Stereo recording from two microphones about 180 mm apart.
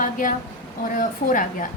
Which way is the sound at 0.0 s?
45° left (ahead or behind).